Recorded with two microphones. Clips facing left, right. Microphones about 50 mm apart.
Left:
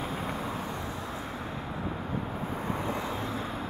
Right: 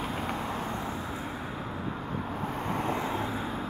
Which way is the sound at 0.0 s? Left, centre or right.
Right.